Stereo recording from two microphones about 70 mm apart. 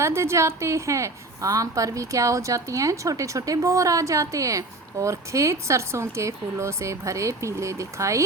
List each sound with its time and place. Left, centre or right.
0.0 s a woman's voice: right